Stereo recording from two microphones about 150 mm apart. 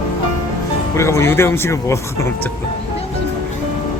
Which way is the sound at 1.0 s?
20° left (ahead or behind).